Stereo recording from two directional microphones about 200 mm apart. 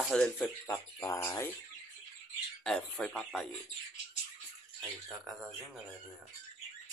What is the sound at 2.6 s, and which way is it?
Speech, 5° left (ahead or behind).